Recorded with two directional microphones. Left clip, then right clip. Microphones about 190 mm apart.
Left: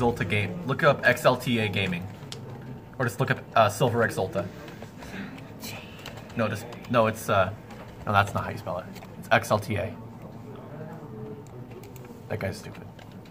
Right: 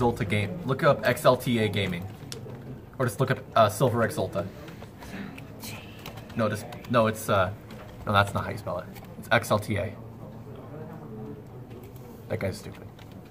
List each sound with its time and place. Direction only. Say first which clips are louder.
0.0 s speech: left 1 dB; 5° right (ahead or behind)
3.0 s speech: even; 5° right (ahead or behind)
5.1 s a sound: even; centre (ahead or behind)
6.3 s speech: right 1 dB; 5° right (ahead or behind)
12.3 s speech: right 1 dB; 5° right (ahead or behind)